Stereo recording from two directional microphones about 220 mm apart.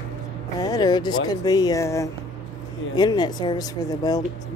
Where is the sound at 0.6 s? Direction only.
15° left (ahead or behind).